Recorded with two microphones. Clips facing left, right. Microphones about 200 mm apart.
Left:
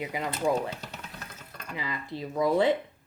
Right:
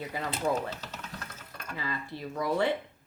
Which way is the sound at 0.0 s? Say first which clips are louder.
Left 3 dB; 15° left (ahead or behind).